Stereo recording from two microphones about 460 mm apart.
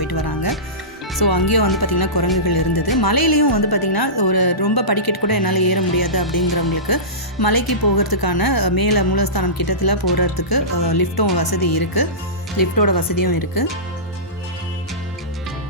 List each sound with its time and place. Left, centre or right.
0.0 s music: left
1.2 s speech: left